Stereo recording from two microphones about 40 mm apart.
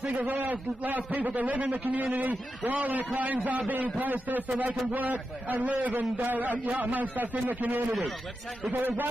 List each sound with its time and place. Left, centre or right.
0.2 s a man's voice: right